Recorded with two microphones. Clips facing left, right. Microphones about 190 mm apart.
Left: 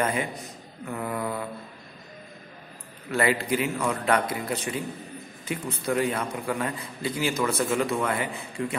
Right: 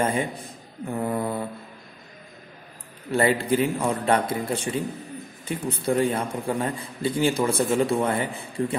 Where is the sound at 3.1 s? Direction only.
30° right (ahead or behind).